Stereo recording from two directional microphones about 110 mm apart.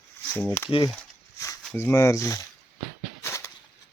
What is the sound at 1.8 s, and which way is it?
Speech, 25° left (ahead or behind).